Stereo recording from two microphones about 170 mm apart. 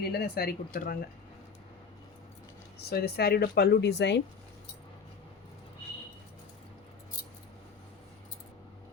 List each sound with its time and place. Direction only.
0.0 s speech: 65° left (ahead or behind)
2.9 s speech: 70° left (ahead or behind); by 4.2 s 85° left